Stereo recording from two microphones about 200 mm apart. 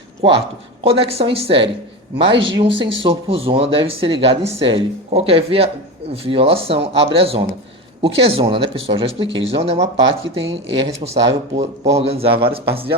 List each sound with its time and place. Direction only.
0.2 s speech: 25° right (ahead or behind)